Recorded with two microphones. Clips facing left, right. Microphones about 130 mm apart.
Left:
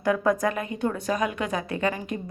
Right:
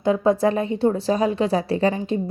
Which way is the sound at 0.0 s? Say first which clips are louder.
Right 5 dB; 25° right (ahead or behind).